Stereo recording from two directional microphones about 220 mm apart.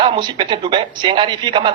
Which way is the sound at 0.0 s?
20° right (ahead or behind).